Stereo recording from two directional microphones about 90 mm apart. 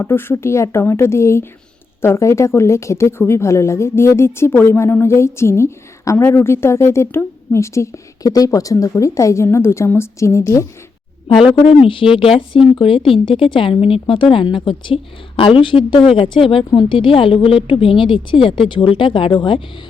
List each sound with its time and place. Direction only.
0.0 s a woman's voice: 25° left (ahead or behind)
11.7 s a woman's voice: 85° left; by 19.6 s 65° left (ahead or behind)